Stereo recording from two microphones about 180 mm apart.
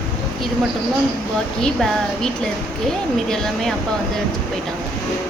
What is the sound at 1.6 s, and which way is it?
Speech, centre (ahead or behind).